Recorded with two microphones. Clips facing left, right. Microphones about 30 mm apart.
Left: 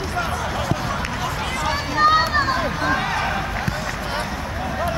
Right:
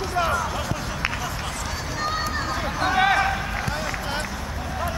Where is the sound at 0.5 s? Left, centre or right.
Centre.